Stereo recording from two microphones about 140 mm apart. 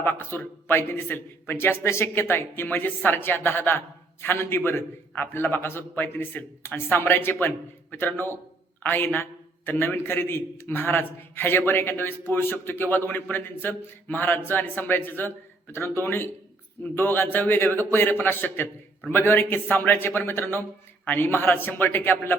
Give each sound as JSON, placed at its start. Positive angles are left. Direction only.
{"t": 0.0, "sound": "a man's voice", "side_deg": 15}